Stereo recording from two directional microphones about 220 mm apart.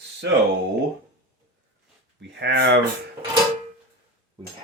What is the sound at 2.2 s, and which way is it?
Speech, 50° right (ahead or behind).